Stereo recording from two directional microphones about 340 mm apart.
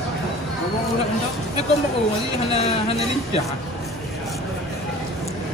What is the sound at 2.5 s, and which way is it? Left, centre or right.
Speech, centre.